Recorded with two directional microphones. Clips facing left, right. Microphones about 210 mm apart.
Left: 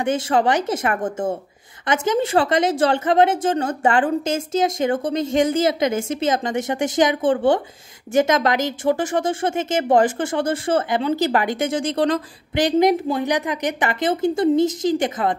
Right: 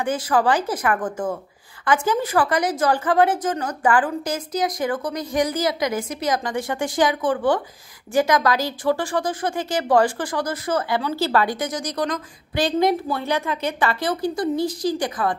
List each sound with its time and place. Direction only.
0.0 s speech: 25° left (ahead or behind)